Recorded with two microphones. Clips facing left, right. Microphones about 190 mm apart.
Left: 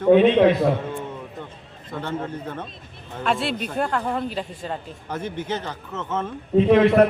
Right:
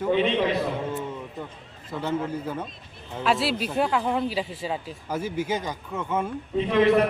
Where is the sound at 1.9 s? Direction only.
10° right (ahead or behind).